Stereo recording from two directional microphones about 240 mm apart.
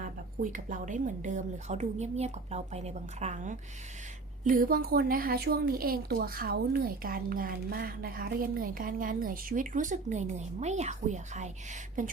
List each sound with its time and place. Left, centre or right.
0.0 s a woman's voice: right